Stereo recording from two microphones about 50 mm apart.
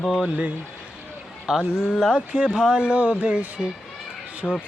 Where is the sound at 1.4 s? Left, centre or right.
Centre.